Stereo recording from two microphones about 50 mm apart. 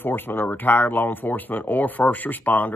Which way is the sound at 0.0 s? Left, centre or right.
Left.